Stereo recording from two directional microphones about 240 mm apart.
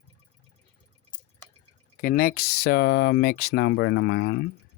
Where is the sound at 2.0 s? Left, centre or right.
Left.